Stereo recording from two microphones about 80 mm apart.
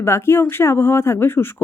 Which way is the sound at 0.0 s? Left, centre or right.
Left.